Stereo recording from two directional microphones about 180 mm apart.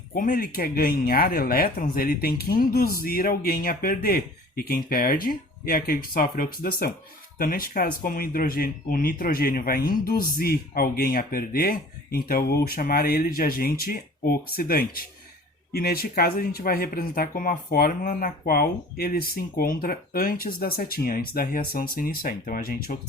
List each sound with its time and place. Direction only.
0.1 s speech: 50° left (ahead or behind)